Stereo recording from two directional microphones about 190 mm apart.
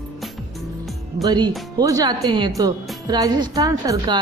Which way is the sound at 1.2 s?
20° right (ahead or behind).